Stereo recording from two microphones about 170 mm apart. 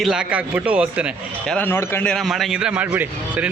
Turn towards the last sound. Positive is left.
turn(degrees=-10)  # may be behind; listen again after turning